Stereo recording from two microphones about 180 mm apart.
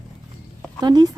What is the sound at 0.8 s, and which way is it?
Speech, 25° right (ahead or behind).